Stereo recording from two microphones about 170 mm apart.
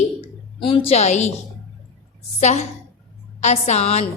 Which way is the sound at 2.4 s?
40° left (ahead or behind).